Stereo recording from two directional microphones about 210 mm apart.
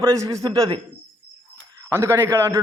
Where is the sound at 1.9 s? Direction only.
10° right (ahead or behind).